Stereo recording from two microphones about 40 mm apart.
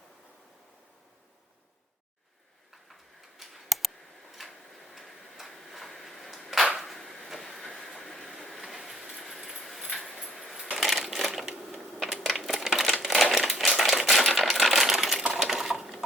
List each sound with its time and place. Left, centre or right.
2.9 s tick-tock: centre
4.9 s tick-tock: centre
6.7 s a sound: centre
7.0 s train: centre
9.0 s keys jangling: centre
9.9 s a sound: centre
10.3 s coin: centre
10.8 s crushing: centre
12.2 s typewriter: centre
13.3 s crumpling: centre
14.8 s a sound: centre
15.3 s coin: centre